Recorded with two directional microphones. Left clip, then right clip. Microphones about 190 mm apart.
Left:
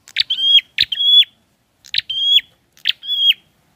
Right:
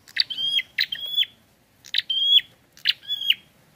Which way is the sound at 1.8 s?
25° left (ahead or behind).